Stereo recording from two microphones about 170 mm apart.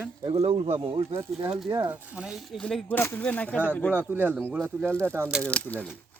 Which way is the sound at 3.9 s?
10° right (ahead or behind).